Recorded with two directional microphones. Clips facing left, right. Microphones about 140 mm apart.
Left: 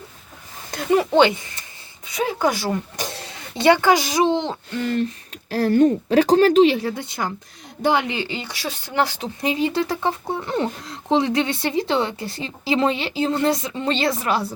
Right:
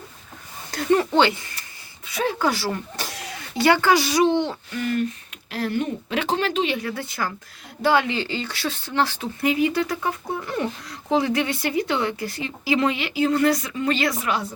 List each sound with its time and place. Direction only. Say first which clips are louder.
0.9 s speech: left 4 dB; 15° left (ahead or behind); by 6.9 s 35° left (ahead or behind)
6.9 s speech: left 1 dB; 20° left (ahead or behind)